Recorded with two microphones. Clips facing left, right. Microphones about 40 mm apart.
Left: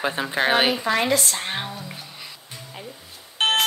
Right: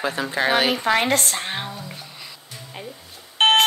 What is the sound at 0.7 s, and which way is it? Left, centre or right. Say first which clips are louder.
Speech: right 2 dB; right.